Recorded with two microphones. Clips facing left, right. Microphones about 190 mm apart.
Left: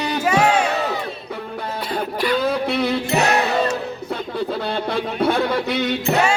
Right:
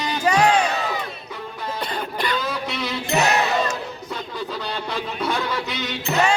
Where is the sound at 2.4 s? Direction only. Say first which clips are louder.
Left 7 dB; 55° left (ahead or behind).